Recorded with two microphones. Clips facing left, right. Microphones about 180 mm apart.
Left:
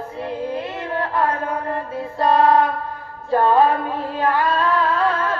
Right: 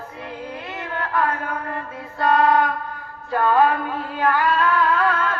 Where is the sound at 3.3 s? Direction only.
30° left (ahead or behind).